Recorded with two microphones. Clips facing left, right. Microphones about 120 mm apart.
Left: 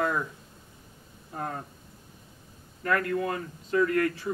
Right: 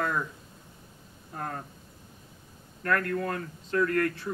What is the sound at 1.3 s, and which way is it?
Speech, 5° left (ahead or behind).